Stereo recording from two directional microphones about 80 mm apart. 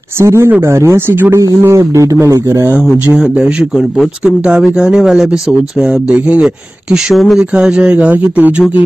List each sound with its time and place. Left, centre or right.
0.2 s speech: right
3.2 s speech: centre